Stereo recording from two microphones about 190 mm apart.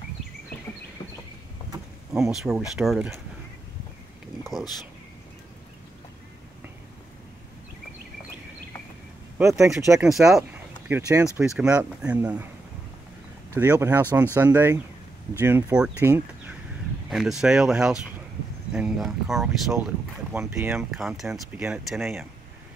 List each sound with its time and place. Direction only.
2.3 s speech: centre (ahead or behind)
9.4 s speech: 15° right (ahead or behind)
9.9 s speech: centre (ahead or behind)
10.9 s speech: 15° right (ahead or behind)
11.3 s speech: 5° right (ahead or behind)
13.6 s speech: 10° right (ahead or behind)
20.3 s speech: 15° right (ahead or behind)